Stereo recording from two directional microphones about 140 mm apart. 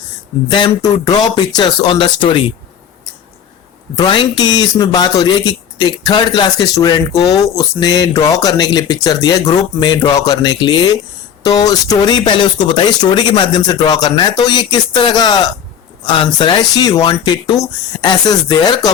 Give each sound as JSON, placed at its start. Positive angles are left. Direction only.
{"t": 0.5, "sound": "speech", "side_deg": 30}
{"t": 3.9, "sound": "speech", "side_deg": 35}